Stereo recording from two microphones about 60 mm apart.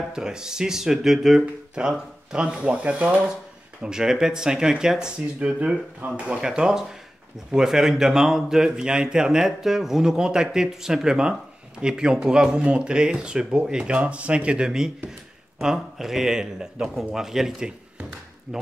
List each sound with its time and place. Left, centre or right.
0.1 s speech: centre
5.9 s speech: right
6.2 s speech: centre